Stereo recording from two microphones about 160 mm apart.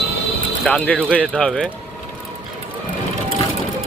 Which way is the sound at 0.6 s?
5° left (ahead or behind).